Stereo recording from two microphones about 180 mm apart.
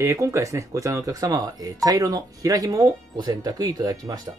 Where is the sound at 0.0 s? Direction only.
15° right (ahead or behind).